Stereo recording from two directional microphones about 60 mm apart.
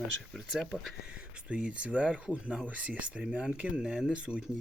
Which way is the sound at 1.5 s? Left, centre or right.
Centre.